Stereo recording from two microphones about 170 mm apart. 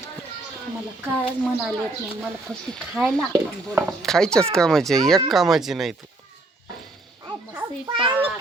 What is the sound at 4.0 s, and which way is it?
Speech, 5° left (ahead or behind).